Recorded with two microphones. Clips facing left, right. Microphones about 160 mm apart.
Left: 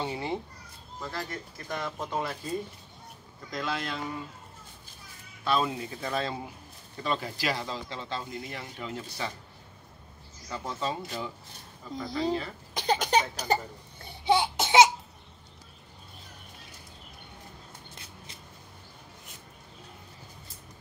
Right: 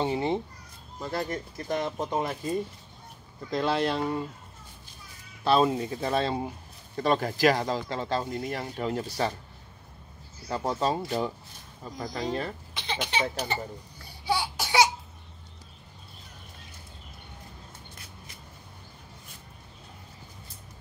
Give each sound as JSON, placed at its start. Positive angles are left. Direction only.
{"t": 0.0, "sound": "speech", "side_deg": -25}
{"t": 3.5, "sound": "speech", "side_deg": -30}
{"t": 5.4, "sound": "speech", "side_deg": -35}
{"t": 7.0, "sound": "speech", "side_deg": -45}
{"t": 10.5, "sound": "speech", "side_deg": -45}
{"t": 12.7, "sound": "cough", "side_deg": 40}
{"t": 14.0, "sound": "laughter", "side_deg": 20}